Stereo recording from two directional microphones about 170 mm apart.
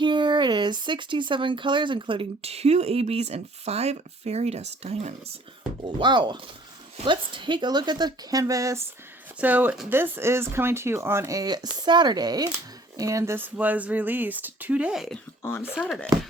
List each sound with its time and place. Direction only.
0.0 s speech: 25° right (ahead or behind)
6.0 s speech: 25° right (ahead or behind); by 15.2 s centre (ahead or behind)
15.4 s speech: 15° left (ahead or behind)